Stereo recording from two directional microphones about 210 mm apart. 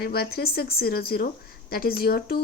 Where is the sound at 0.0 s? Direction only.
45° left (ahead or behind).